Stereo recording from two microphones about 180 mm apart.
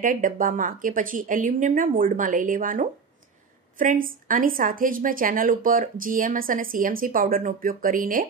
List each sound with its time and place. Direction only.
0.0 s a woman's voice: 50° right (ahead or behind)